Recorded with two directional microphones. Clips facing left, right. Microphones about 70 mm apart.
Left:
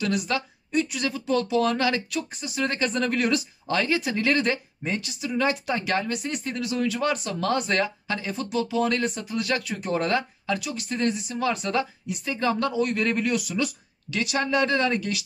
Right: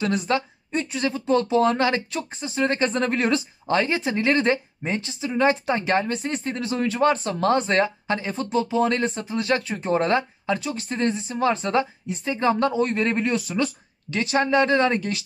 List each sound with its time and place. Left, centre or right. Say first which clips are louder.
0.0 s speech: right 3 dB; right